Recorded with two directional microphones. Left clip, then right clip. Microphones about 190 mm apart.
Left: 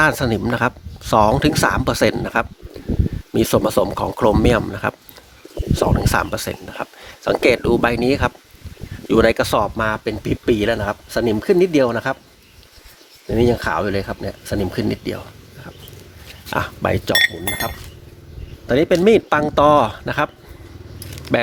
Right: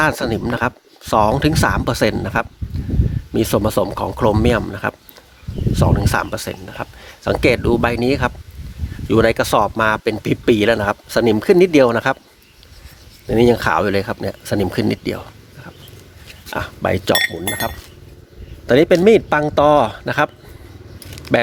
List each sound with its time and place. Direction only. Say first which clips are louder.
0.0 s speech: left 1 dB; 5° right (ahead or behind); by 12.1 s 35° right (ahead or behind)
13.2 s speech: right 4 dB; 35° right (ahead or behind)
16.5 s speech: left 3 dB; 15° left (ahead or behind)
17.1 s speech: left 2 dB; 25° right (ahead or behind)
18.6 s speech: right 4 dB; 40° right (ahead or behind)
18.9 s speech: even; 20° right (ahead or behind)
19.1 s speech: right 1 dB; 5° right (ahead or behind)
21.2 s keys jangling: right 3 dB; 20° right (ahead or behind)